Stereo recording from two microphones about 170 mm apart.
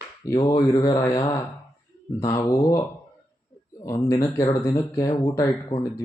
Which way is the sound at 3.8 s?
20° left (ahead or behind).